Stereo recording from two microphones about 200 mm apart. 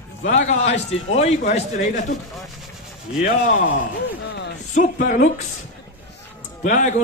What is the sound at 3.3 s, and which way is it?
Speech, 45° left (ahead or behind).